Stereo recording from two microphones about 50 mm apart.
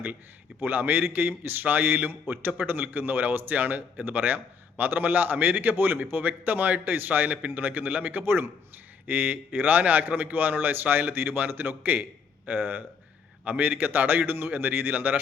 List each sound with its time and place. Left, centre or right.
0.6 s a man's voice: right
9.0 s a man's voice: right